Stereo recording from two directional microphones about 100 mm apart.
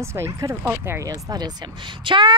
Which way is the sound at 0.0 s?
25° right (ahead or behind).